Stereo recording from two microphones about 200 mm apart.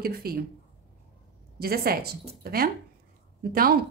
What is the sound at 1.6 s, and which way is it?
Speech, 50° right (ahead or behind).